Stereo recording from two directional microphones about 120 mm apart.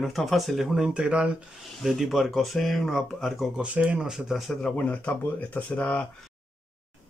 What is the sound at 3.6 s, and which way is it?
Speech, 10° right (ahead or behind).